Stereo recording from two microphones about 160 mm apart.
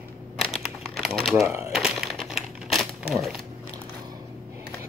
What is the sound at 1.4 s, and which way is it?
Speech, 15° right (ahead or behind).